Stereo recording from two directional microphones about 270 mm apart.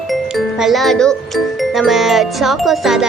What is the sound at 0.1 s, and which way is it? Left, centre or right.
Music, centre.